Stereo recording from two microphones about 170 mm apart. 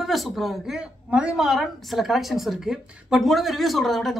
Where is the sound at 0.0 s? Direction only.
Centre (ahead or behind).